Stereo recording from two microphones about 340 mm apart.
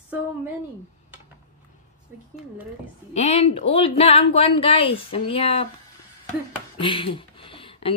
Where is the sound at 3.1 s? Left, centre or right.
Centre.